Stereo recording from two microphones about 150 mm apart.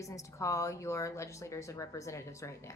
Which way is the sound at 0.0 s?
20° left (ahead or behind).